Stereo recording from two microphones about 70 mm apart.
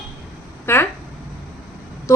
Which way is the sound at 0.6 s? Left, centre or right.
Left.